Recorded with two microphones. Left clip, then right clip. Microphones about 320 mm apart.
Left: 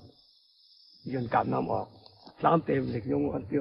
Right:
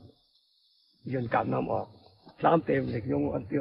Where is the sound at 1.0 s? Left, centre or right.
Left.